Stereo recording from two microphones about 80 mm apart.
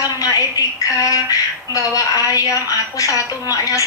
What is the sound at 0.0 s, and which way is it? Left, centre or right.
A woman's voice, left.